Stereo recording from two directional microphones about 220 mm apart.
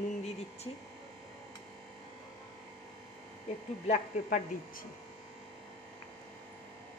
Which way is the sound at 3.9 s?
40° left (ahead or behind).